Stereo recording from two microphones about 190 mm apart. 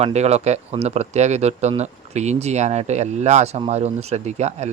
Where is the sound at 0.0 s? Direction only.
35° right (ahead or behind).